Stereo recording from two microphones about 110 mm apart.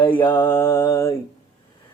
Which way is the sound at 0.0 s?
15° left (ahead or behind).